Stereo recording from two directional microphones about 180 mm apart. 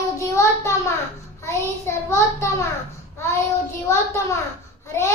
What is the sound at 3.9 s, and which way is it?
A child's voice, 15° left (ahead or behind).